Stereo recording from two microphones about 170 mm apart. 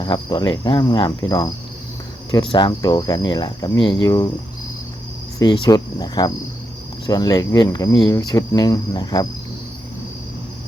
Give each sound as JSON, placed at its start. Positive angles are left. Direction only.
{"t": 0.0, "sound": "speech", "side_deg": 25}
{"t": 5.4, "sound": "speech", "side_deg": 20}